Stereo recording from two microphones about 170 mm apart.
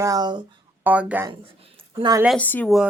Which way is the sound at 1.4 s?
35° right (ahead or behind).